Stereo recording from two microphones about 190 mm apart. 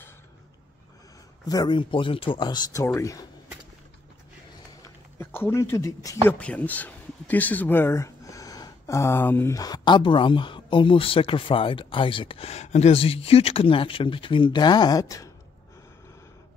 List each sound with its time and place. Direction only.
1.5 s speech: 20° left (ahead or behind)
4.8 s speech: 10° left (ahead or behind)